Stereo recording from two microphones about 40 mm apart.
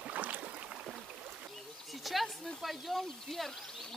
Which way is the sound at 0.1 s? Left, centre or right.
Right.